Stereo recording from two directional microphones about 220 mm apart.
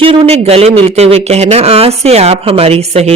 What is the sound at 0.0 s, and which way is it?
Speech, 25° right (ahead or behind).